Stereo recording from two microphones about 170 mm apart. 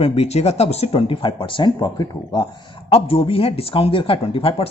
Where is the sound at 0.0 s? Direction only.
40° left (ahead or behind).